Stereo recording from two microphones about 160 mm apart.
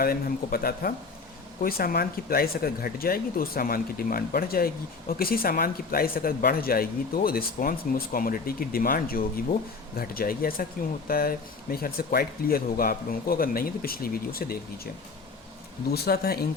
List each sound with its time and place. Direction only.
0.0 s speech: 65° left (ahead or behind)
15.9 s speech: 80° left